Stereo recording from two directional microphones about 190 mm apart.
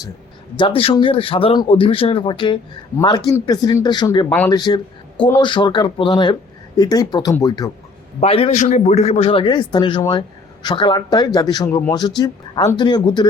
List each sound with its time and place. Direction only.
0.5 s a man's voice: 25° left (ahead or behind)
4.3 s speech: 10° left (ahead or behind)
4.5 s a man's voice: 20° left (ahead or behind)
8.2 s a man's voice: 30° left (ahead or behind)